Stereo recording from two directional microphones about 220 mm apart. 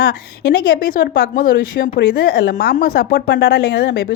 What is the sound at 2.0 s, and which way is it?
A woman's voice, 50° left (ahead or behind).